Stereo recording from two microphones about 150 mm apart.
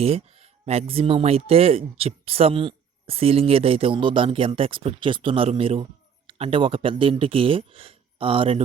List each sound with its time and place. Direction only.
0.0 s speech: 40° right (ahead or behind)